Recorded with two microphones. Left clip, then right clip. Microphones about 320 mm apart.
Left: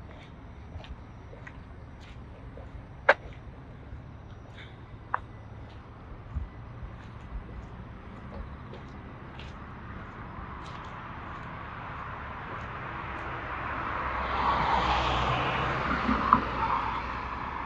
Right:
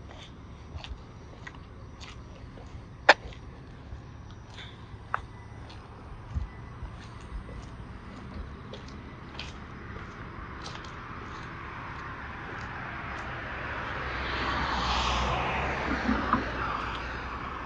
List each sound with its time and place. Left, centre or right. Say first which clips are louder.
12.4 s vehicle: right 1 dB; centre; by 16.3 s left
16.3 s vehicle: left 5 dB; left